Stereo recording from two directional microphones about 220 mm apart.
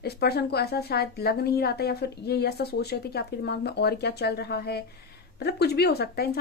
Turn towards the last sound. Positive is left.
turn(degrees=45)  # may be behind; listen again after turning